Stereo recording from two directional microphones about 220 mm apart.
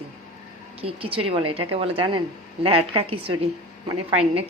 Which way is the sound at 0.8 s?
25° right (ahead or behind).